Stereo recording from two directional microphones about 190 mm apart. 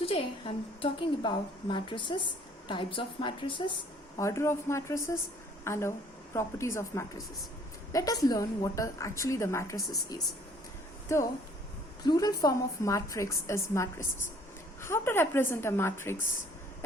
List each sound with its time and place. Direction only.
0.0 s a woman's voice: 30° left (ahead or behind)
4.2 s a woman's voice: 15° left (ahead or behind)
11.1 s a woman's voice: 15° left (ahead or behind)